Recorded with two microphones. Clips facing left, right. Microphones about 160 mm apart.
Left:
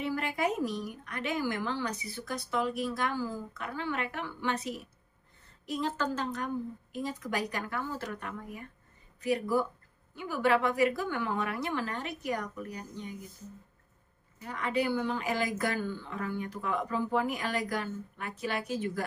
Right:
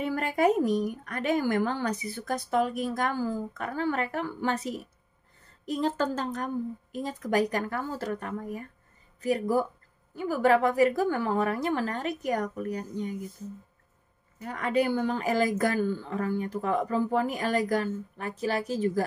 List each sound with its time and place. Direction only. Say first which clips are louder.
0.0 s a woman's voice: right 6 dB; 50° right (ahead or behind)
14.4 s speech: right 4 dB; 45° right (ahead or behind)